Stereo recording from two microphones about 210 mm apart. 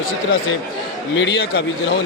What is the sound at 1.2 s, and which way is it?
Speech, 55° left (ahead or behind).